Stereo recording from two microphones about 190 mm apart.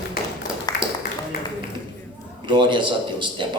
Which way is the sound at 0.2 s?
50° left (ahead or behind).